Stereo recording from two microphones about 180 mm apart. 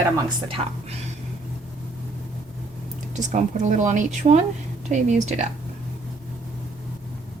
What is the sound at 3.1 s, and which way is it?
Speech, 45° right (ahead or behind).